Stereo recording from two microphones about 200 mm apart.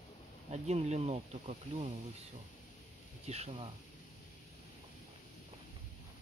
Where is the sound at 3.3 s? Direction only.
30° right (ahead or behind).